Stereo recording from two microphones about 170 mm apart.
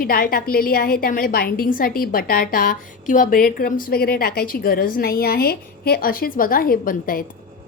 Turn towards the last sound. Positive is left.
turn(degrees=55)  # may be behind; listen again after turning